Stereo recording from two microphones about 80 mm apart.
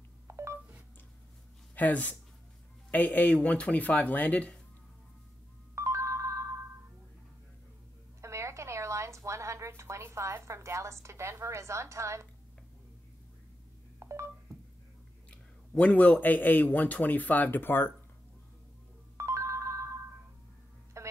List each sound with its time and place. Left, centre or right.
0.3 s telephone dialing: right
1.8 s a man's voice: left
5.8 s ringtone: right
8.2 s a sound: right
13.9 s telephone dialing: right
15.7 s a man's voice: centre
19.1 s ringtone: right
21.0 s telephone: right